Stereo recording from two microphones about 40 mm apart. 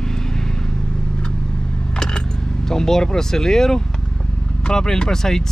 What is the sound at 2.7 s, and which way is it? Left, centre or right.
Speech, centre.